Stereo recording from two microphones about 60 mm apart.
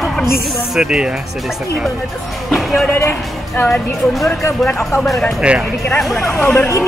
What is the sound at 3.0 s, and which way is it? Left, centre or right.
Speech, left.